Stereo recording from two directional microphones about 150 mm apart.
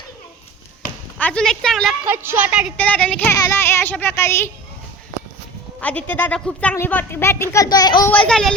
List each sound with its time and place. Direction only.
1.2 s a woman's voice: 5° left (ahead or behind)
2.0 s a woman's voice: 15° right (ahead or behind)
2.7 s a child's voice: 10° left (ahead or behind)
5.8 s a child's voice: 10° left (ahead or behind); by 8.1 s 25° left (ahead or behind)
8.1 s a woman's voice: 5° left (ahead or behind)